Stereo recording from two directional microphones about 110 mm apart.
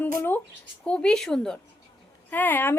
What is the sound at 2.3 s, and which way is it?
Speech, 15° left (ahead or behind).